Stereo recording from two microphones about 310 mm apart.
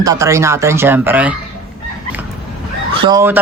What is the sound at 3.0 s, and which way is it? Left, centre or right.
Speech, centre.